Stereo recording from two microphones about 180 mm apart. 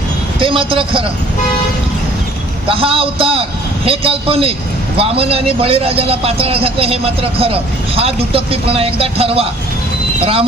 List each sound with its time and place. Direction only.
0.3 s speech: 30° right (ahead or behind)
2.6 s a man's voice: 30° right (ahead or behind)